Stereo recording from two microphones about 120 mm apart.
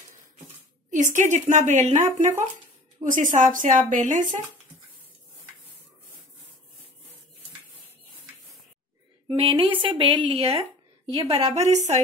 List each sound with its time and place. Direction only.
0.8 s speech: 90° right; by 2.3 s 70° right (ahead or behind)
3.0 s a woman's voice: 90° right
9.3 s a woman's voice: 45° right (ahead or behind); by 12.0 s 70° right (ahead or behind)